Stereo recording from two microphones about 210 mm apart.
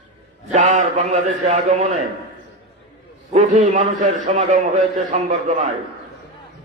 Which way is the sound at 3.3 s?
35° right (ahead or behind).